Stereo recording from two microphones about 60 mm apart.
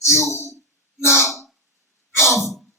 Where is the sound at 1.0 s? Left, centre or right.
Left.